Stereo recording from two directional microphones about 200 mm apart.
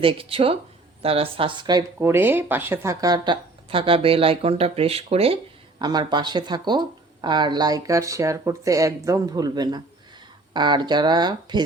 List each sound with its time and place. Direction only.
0.0 s speech: 25° right (ahead or behind)